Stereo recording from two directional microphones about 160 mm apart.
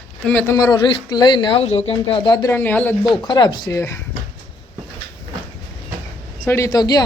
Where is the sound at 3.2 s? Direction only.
25° left (ahead or behind).